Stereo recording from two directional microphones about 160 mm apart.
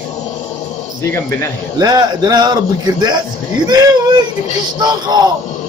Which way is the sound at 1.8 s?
25° right (ahead or behind).